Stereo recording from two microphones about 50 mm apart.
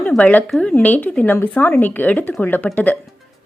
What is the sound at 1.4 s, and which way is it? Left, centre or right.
Speech, left.